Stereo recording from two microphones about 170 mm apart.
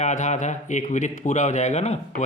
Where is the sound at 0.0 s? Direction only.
45° left (ahead or behind).